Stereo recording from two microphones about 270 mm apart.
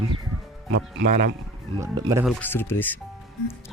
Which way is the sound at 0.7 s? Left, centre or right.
Right.